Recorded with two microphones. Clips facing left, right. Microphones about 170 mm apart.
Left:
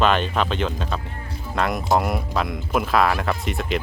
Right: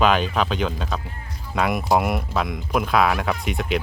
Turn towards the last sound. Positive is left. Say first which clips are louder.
# even
turn(degrees=0)  # may be behind; listen again after turning